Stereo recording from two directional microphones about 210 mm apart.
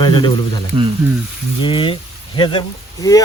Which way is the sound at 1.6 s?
25° left (ahead or behind).